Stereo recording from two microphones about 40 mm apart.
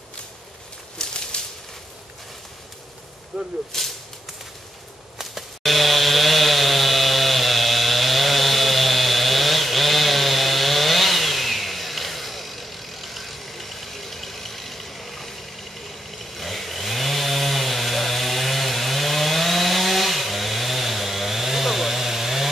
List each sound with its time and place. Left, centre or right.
1.0 s a sound: centre
3.3 s speech: centre
3.7 s speech: centre
5.2 s chainsaw: centre
16.3 s chainsaw: centre